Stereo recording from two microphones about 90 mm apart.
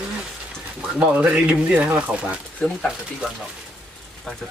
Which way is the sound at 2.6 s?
5° left (ahead or behind).